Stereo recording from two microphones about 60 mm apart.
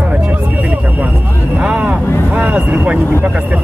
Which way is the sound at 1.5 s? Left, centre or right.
Right.